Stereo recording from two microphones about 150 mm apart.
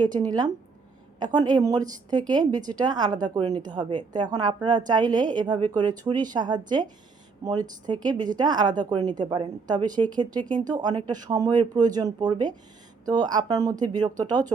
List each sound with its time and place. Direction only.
0.0 s speech: 25° right (ahead or behind)